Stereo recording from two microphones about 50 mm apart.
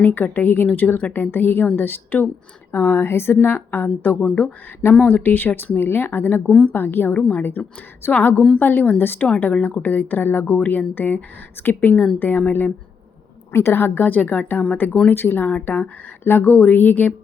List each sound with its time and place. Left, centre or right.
0.0 s a woman's voice: left
3.4 s speech: left
4.2 s speech: left
5.0 s speech: left
6.4 s a woman's voice: centre
6.7 s a woman's voice: left
7.2 s speech: left
8.1 s a woman's voice: left
9.0 s speech: left
9.4 s a woman's voice: left
13.5 s a woman's voice: left
13.8 s a woman's voice: left
15.1 s a woman's voice: left